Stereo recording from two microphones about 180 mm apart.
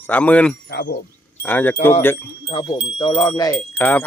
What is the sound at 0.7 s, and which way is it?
Speech, 65° left (ahead or behind).